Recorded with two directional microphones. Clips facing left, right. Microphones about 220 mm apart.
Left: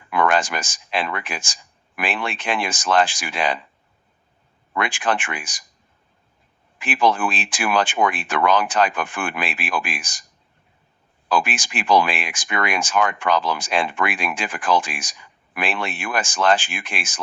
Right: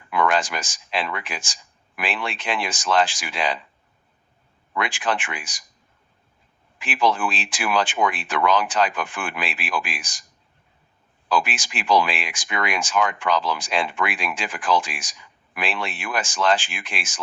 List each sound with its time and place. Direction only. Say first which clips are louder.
0.1 s speech: left 2 dB; 50° left (ahead or behind)
4.7 s speech: left 2 dB; 50° left (ahead or behind)
6.7 s speech: left 2 dB; 50° left (ahead or behind)
11.3 s speech: left 2 dB; 50° left (ahead or behind)